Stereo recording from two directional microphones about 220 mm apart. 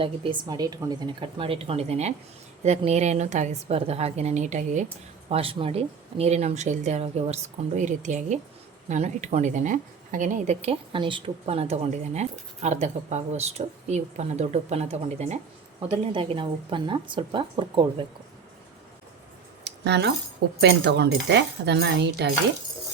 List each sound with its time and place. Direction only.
0.0 s a woman's voice: 25° right (ahead or behind)
19.6 s keys jangling: 50° right (ahead or behind)
20.6 s speech: 50° right (ahead or behind)